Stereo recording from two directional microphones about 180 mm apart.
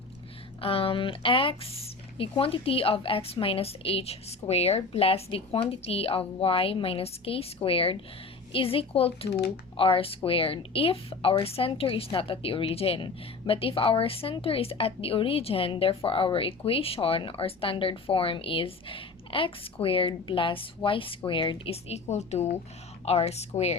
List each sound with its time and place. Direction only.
0.6 s speech: 30° left (ahead or behind)